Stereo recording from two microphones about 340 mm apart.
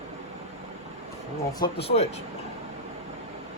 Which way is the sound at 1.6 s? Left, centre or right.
Centre.